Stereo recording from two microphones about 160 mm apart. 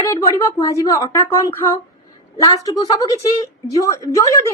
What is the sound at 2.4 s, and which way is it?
A woman's voice, 25° left (ahead or behind).